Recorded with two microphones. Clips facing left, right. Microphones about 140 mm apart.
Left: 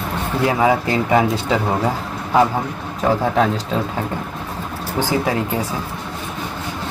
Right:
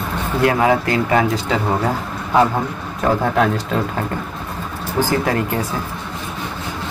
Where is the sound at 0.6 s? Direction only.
10° left (ahead or behind).